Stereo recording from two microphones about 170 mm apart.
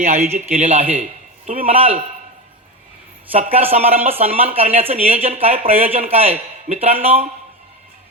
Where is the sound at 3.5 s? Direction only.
35° right (ahead or behind).